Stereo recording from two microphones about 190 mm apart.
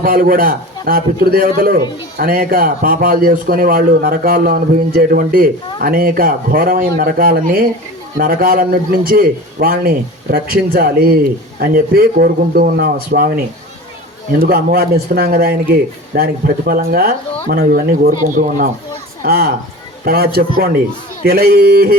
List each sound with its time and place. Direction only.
0.0 s speech: 50° right (ahead or behind)